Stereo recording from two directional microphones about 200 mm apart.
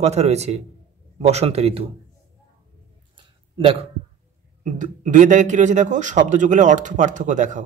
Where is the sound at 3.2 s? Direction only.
25° right (ahead or behind).